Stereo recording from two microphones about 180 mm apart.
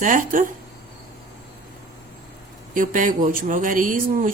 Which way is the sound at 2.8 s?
45° right (ahead or behind).